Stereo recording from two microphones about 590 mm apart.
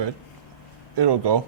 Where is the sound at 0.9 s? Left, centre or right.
Right.